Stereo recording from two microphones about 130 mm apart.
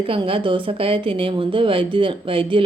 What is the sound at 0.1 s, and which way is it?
A woman's voice, 45° right (ahead or behind).